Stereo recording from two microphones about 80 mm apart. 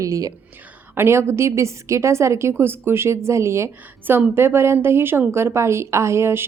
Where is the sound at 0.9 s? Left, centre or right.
Right.